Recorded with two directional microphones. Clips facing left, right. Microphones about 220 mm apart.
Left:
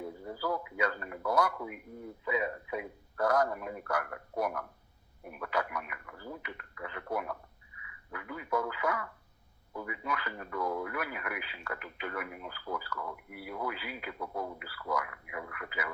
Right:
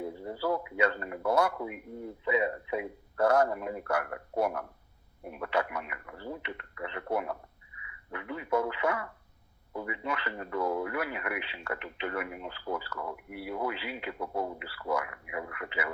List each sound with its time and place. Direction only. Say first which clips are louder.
0.0 s speech: right 4 dB; 30° right (ahead or behind)